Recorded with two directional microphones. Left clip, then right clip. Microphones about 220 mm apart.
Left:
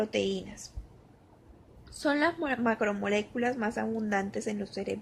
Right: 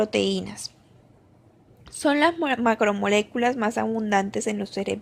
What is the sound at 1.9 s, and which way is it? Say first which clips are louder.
Speech: right 7 dB; 20° right (ahead or behind).